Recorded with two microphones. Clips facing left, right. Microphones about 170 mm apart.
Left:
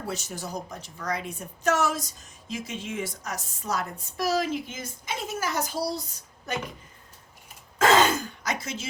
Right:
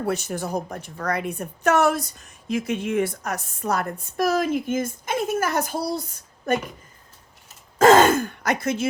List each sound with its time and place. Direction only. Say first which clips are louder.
0.0 s a woman's voice: right 8 dB; 60° right (ahead or behind)
7.8 s sigh: right 6 dB; 45° right (ahead or behind)